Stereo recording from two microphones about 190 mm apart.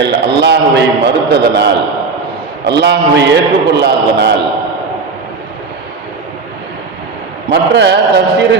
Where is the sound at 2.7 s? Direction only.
60° right (ahead or behind).